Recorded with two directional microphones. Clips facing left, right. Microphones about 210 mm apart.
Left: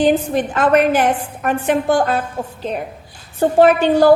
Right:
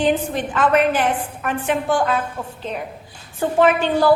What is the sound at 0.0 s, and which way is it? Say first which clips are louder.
A woman's voice: left 4 dB; 40° left (ahead or behind).